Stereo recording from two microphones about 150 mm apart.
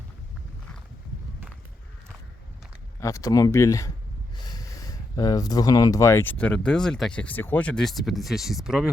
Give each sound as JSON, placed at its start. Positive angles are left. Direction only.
{"t": 3.0, "sound": "speech", "side_deg": 20}